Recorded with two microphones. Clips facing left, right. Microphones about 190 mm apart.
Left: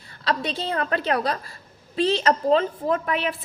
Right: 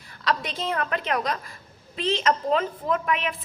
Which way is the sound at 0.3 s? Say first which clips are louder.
Left 1 dB; 35° left (ahead or behind).